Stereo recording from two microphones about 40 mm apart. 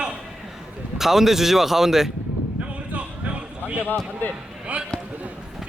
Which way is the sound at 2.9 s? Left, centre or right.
Right.